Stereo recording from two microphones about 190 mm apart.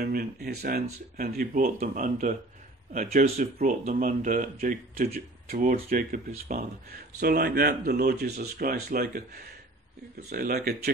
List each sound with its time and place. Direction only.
0.0 s speech: 55° right (ahead or behind)